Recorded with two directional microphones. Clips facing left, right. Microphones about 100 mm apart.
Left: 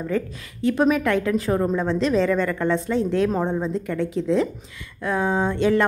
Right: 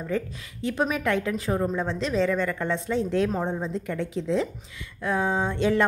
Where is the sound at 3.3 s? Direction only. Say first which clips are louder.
Left 5 dB; 5° left (ahead or behind).